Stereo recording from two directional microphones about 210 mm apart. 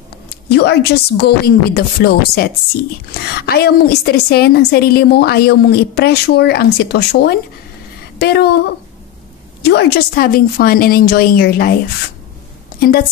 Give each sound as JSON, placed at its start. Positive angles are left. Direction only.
{"t": 0.5, "sound": "a woman's voice", "side_deg": 50}
{"t": 9.6, "sound": "a woman's voice", "side_deg": 50}